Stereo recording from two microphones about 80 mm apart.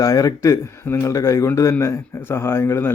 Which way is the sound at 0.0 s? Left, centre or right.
Left.